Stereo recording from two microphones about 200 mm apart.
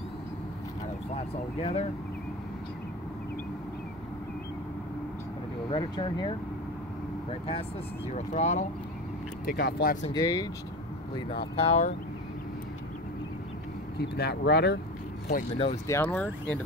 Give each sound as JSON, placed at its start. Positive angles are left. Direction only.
{"t": 1.1, "sound": "speech", "side_deg": 30}
{"t": 5.7, "sound": "speech", "side_deg": 25}
{"t": 8.1, "sound": "speech", "side_deg": 35}
{"t": 9.5, "sound": "speech", "side_deg": 50}
{"t": 10.1, "sound": "speech", "side_deg": 20}
{"t": 11.5, "sound": "speech", "side_deg": 30}
{"t": 13.9, "sound": "speech", "side_deg": 55}
{"t": 15.9, "sound": "speech", "side_deg": 10}